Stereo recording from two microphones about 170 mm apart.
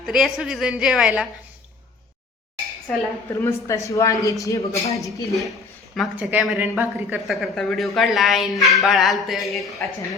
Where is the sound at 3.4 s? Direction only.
15° left (ahead or behind).